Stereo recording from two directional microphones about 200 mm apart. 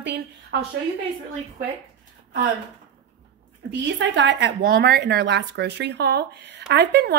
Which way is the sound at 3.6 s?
65° right (ahead or behind).